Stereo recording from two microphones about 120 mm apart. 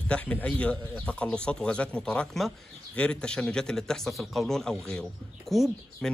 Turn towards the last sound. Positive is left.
turn(degrees=0)  # may be behind; listen again after turning